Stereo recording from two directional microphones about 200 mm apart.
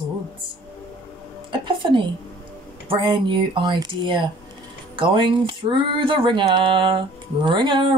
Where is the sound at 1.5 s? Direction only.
25° right (ahead or behind).